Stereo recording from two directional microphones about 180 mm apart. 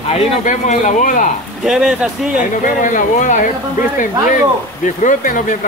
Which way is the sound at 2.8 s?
45° left (ahead or behind).